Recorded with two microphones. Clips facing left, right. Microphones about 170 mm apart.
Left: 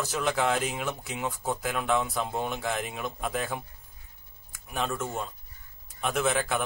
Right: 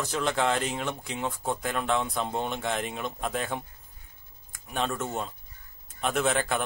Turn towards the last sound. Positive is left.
turn(degrees=0)  # may be behind; listen again after turning